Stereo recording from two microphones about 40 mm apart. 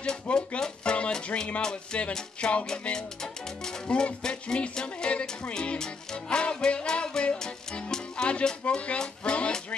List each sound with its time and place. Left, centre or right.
0.0 s music: left
3.8 s speech: left
4.2 s music: left
7.9 s speech: left